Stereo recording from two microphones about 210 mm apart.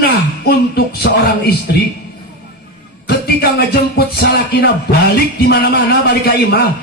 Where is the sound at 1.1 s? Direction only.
55° left (ahead or behind).